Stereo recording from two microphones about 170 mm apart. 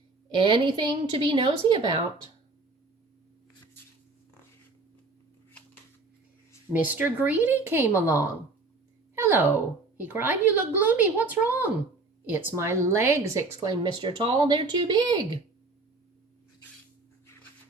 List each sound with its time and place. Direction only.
0.3 s a woman's voice: 30° right (ahead or behind)
6.9 s a woman's voice: 10° right (ahead or behind); by 15.4 s 30° right (ahead or behind)